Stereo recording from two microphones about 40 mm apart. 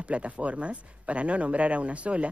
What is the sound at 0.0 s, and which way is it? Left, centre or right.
Speech, right.